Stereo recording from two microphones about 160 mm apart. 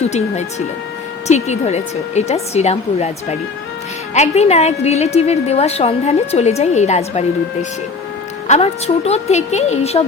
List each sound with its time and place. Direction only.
1.3 s a woman's voice: 45° left (ahead or behind)
8.4 s a woman's voice: 40° left (ahead or behind)